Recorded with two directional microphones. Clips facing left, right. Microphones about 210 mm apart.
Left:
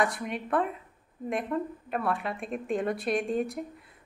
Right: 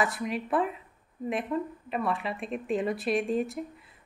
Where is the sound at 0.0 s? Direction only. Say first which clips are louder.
Even; centre (ahead or behind).